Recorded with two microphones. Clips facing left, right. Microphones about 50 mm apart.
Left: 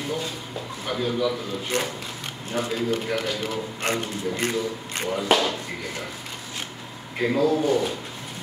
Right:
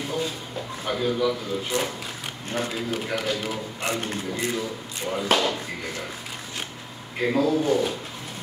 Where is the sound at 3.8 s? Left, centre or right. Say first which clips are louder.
Left 2 dB; left.